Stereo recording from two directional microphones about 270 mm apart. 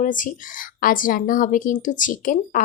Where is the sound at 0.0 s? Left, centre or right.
Left.